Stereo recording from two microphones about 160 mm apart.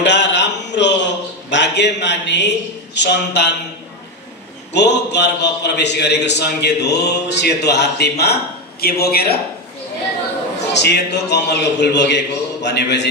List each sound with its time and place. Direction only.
0.0 s a sound: 90° left
4.7 s a man's voice: 90° left
8.8 s a man's voice: 75° left (ahead or behind)
10.7 s a man's voice: 90° left